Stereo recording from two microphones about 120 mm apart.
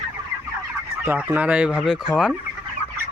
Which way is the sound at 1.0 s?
15° right (ahead or behind).